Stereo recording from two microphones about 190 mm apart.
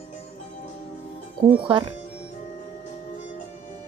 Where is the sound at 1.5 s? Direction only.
25° right (ahead or behind).